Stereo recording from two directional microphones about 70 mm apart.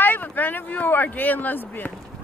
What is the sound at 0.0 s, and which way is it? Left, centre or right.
Speech, left.